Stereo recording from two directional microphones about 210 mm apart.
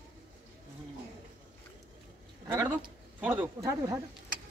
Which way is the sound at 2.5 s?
5° right (ahead or behind).